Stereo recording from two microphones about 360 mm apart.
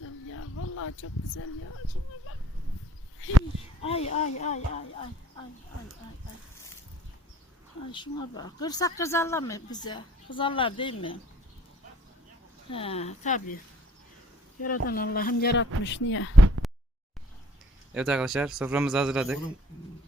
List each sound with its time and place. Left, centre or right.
0.0 s a sound: left
0.8 s speech: left
3.8 s speech: centre
7.9 s speech: centre
12.7 s speech: centre
14.6 s speech: left
16.6 s a sound: centre
17.9 s a man's voice: centre